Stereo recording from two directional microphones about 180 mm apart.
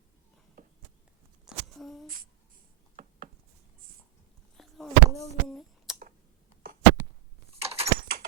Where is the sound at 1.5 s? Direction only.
Centre (ahead or behind).